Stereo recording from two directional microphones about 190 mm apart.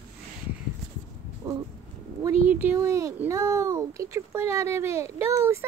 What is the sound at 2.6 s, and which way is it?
Speech, 15° right (ahead or behind).